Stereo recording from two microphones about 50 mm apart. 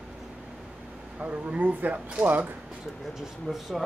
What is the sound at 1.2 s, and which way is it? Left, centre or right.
Speech, right.